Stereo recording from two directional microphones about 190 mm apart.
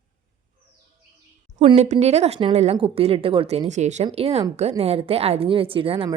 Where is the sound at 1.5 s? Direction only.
35° right (ahead or behind).